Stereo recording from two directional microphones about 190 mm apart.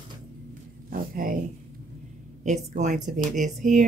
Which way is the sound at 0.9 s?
50° right (ahead or behind).